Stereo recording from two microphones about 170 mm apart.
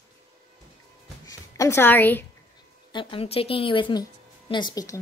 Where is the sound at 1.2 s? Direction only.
20° left (ahead or behind).